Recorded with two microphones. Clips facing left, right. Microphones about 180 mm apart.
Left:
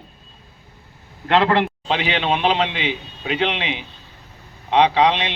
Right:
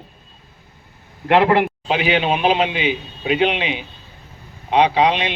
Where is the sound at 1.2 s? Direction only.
15° right (ahead or behind).